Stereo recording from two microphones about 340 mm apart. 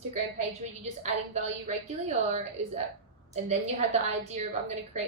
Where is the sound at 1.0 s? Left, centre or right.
Centre.